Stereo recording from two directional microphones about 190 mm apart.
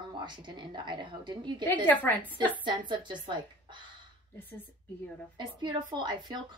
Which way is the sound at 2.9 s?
25° right (ahead or behind).